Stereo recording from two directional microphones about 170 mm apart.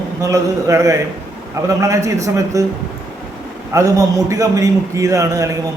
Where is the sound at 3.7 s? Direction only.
20° right (ahead or behind).